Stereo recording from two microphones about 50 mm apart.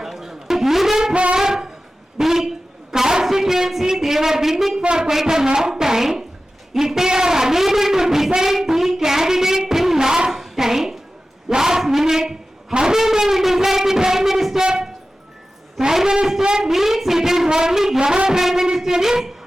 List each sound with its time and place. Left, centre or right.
0.0 s music: centre
1.1 s music: right
1.4 s wind instrument: centre
2.1 s a sound: centre
2.9 s speech: centre
6.7 s a sound: centre